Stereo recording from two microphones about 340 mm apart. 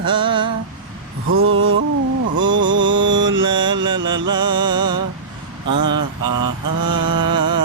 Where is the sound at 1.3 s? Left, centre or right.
Right.